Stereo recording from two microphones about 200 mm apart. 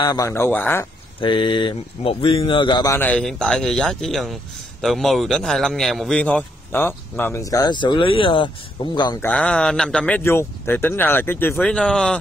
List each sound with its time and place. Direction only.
0.0 s a man's voice: 20° left (ahead or behind)
1.2 s a man's voice: 25° left (ahead or behind)
9.3 s a man's voice: 5° left (ahead or behind)